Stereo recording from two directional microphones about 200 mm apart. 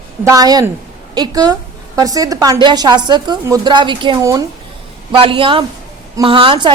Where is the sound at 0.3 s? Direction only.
20° right (ahead or behind).